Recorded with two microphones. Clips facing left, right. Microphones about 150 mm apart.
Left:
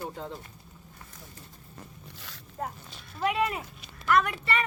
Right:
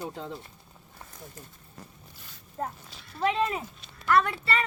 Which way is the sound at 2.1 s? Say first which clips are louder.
Left 4 dB; 90° left.